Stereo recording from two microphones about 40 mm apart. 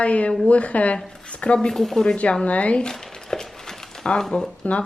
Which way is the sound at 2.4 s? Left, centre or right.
Left.